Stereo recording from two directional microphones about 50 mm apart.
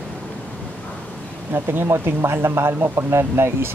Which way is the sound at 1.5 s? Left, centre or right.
Right.